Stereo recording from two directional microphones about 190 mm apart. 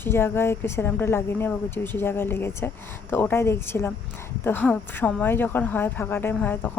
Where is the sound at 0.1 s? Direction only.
10° left (ahead or behind).